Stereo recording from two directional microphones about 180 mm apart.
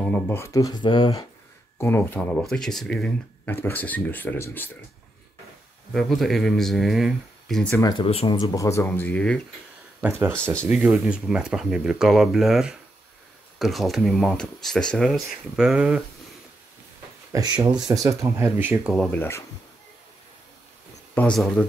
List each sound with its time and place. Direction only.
0.0 s speech: 10° left (ahead or behind); by 1.2 s 25° left (ahead or behind)
1.8 s speech: 10° left (ahead or behind)
5.9 s speech: centre (ahead or behind)
7.8 s speech: 30° left (ahead or behind); by 9.4 s 5° left (ahead or behind)
10.0 s speech: 10° right (ahead or behind)
17.3 s speech: 20° right (ahead or behind)
18.9 s speech: 10° left (ahead or behind)
21.1 s speech: 5° left (ahead or behind)